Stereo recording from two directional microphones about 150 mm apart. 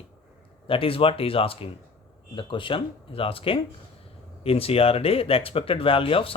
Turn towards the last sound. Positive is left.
turn(degrees=35)  # may be behind; listen again after turning